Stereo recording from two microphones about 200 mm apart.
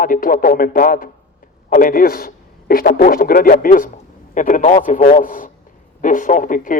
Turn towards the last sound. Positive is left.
turn(degrees=40)  # may be behind; listen again after turning